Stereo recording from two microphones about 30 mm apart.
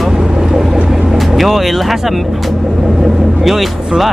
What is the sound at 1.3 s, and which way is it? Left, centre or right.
Speech, centre.